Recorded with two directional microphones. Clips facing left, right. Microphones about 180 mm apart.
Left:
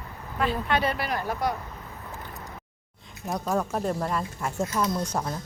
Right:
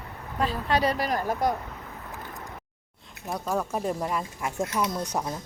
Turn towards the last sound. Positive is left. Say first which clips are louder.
# left 1 dB
turn(degrees=-15)  # may be behind; listen again after turning